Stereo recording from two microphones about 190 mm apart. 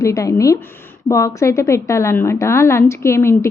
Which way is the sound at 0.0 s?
15° left (ahead or behind).